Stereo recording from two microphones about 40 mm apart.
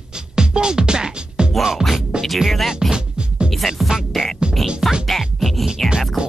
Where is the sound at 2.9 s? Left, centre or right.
Right.